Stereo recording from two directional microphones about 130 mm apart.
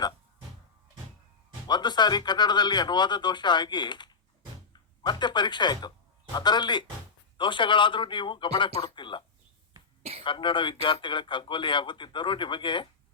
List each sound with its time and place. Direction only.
1.6 s speech: 35° left (ahead or behind)
10.0 s throat clearing: 50° right (ahead or behind)
10.2 s speech: 40° left (ahead or behind)